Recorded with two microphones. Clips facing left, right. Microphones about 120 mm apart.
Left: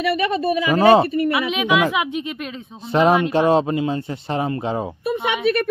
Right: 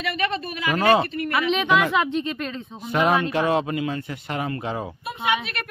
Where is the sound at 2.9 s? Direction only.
25° left (ahead or behind).